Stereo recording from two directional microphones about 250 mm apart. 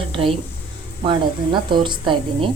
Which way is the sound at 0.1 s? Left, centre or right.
Right.